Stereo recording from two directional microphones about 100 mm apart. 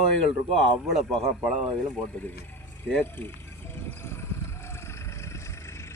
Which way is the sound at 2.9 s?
20° left (ahead or behind).